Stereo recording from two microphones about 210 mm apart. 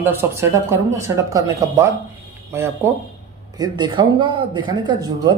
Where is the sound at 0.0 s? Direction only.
10° right (ahead or behind).